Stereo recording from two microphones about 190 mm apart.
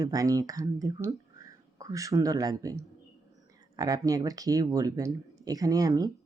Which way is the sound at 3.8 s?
20° right (ahead or behind).